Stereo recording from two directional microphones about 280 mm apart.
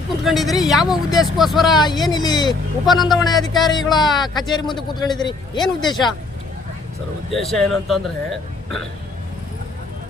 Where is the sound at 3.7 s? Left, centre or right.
Centre.